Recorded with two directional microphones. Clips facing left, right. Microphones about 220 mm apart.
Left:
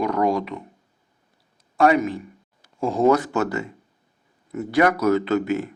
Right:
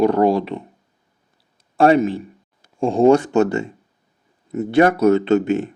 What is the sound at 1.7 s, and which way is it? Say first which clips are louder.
Speech: right 4 dB; 30° right (ahead or behind).